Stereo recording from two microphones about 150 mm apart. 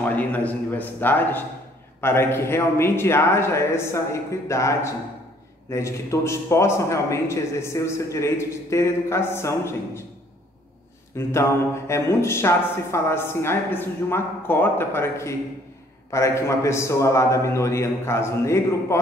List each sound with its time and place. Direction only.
0.0 s a woman's voice: 10° left (ahead or behind)
11.1 s mantra: 20° left (ahead or behind)
11.9 s a woman's voice: 20° left (ahead or behind)